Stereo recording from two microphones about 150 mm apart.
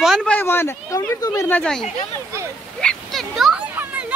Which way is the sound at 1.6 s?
5° left (ahead or behind).